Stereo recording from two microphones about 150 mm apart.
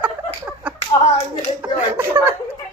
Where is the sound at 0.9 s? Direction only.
20° left (ahead or behind).